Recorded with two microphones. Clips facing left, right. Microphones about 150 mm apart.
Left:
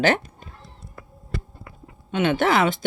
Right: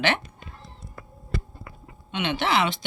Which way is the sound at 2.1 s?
45° left (ahead or behind).